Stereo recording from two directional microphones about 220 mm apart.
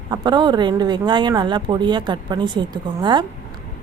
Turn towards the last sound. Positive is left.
turn(degrees=-20)  # may be behind; listen again after turning